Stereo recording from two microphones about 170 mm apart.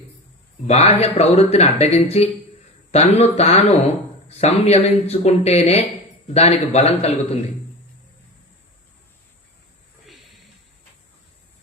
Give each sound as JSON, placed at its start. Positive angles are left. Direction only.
{"t": 0.7, "sound": "speech", "side_deg": 40}